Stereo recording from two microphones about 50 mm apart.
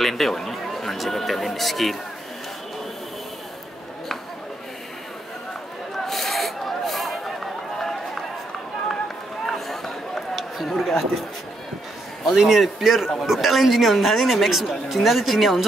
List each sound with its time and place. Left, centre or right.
0.0 s speech: centre
5.9 s a sound: centre
9.5 s run: centre
10.8 s speech: centre
12.3 s speech: centre